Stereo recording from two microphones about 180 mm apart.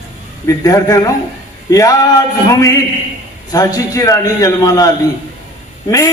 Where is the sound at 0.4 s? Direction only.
20° left (ahead or behind).